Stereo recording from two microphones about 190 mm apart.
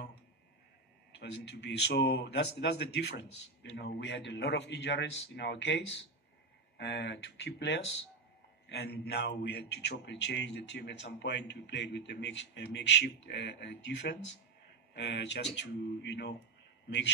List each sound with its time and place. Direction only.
1.2 s a man's voice: 65° left (ahead or behind)